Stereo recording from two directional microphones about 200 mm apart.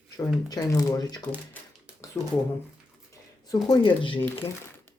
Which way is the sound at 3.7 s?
25° left (ahead or behind).